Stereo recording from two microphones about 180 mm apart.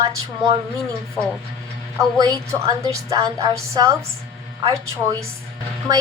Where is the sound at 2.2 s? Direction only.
20° right (ahead or behind).